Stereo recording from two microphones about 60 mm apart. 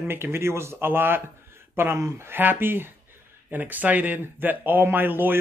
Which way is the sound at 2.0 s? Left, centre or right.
Right.